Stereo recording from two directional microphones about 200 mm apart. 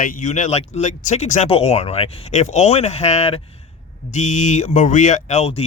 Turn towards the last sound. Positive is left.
turn(degrees=30)  # may be behind; listen again after turning